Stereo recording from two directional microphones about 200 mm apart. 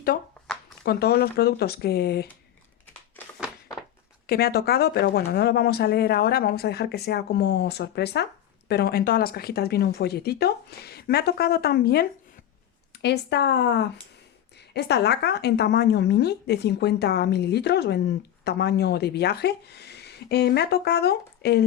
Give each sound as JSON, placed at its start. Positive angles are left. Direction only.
{"t": 0.9, "sound": "speech", "side_deg": 50}
{"t": 4.3, "sound": "a woman's voice", "side_deg": 50}